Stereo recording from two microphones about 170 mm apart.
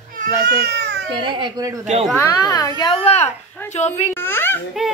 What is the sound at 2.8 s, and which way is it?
Speech, 30° left (ahead or behind).